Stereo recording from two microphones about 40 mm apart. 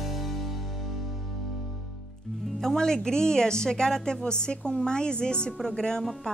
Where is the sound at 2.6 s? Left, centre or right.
Centre.